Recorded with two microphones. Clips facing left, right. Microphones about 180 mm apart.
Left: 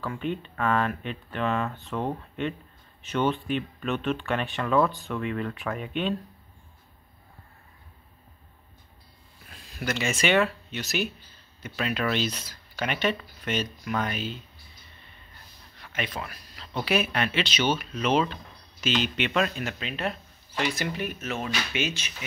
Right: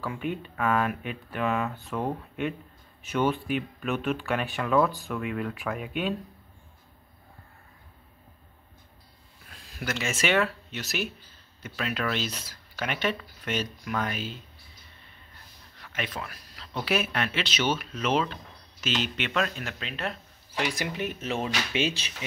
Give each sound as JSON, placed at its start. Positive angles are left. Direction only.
{"t": 0.0, "sound": "speech", "side_deg": -10}
{"t": 9.8, "sound": "speech", "side_deg": 0}
{"t": 15.9, "sound": "speech", "side_deg": 0}
{"t": 20.5, "sound": "speech", "side_deg": -15}